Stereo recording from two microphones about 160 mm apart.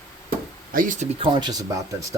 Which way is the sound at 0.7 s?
55° right (ahead or behind).